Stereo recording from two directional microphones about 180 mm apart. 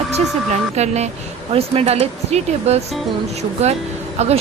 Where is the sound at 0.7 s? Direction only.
40° right (ahead or behind).